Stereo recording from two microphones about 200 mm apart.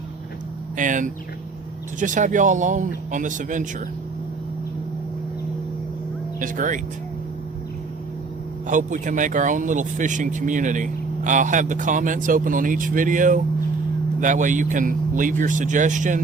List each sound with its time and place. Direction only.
0.8 s speech: 40° right (ahead or behind)
6.4 s speech: 40° right (ahead or behind)
8.6 s speech: 40° right (ahead or behind)